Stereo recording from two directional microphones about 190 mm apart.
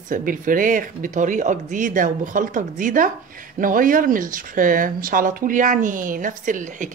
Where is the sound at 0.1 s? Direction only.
45° right (ahead or behind).